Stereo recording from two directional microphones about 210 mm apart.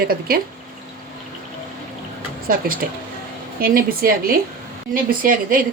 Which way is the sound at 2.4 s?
45° right (ahead or behind).